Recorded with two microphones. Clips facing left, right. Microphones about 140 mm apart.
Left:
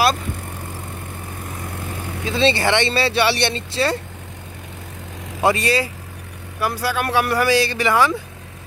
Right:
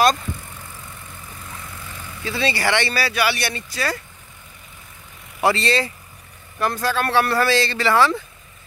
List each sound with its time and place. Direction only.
1.6 s vehicle: 55° left (ahead or behind)
2.2 s speech: 20° left (ahead or behind)
5.4 s speech: 15° left (ahead or behind)